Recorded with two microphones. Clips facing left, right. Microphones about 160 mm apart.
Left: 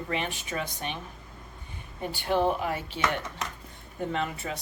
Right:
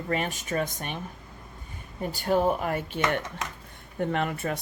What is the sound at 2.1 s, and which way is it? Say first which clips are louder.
Speech: right 2 dB; 40° right (ahead or behind).